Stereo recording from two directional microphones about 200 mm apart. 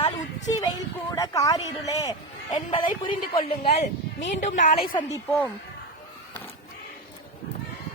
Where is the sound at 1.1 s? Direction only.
15° left (ahead or behind); by 4.9 s 40° left (ahead or behind).